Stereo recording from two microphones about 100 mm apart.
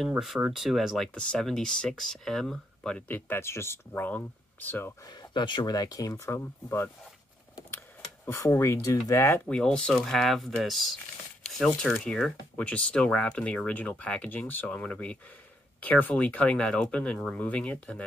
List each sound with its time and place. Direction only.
0.5 s speech: centre (ahead or behind)
3.1 s speech: 20° left (ahead or behind)
5.0 s speech: 45° left (ahead or behind); by 6.9 s 25° left (ahead or behind)
8.5 s speech: 25° left (ahead or behind)
9.5 s speech: 10° left (ahead or behind)